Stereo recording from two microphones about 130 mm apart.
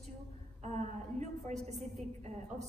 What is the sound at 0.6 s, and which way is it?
A woman's voice, 65° right (ahead or behind).